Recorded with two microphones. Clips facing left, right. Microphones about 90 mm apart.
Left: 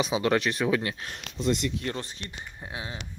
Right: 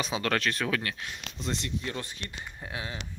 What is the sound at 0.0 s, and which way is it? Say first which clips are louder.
Speech: left 4 dB; 15° left (ahead or behind).